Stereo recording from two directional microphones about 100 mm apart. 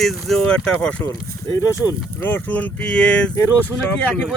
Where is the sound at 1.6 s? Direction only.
40° left (ahead or behind).